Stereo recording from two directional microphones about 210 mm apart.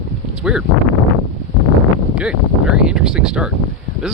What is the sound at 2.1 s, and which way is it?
Speech, 5° right (ahead or behind).